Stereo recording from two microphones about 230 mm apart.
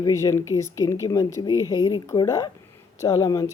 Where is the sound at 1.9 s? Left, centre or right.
Centre.